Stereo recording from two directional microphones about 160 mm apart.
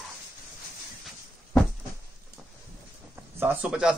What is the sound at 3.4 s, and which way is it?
Speech, 5° right (ahead or behind).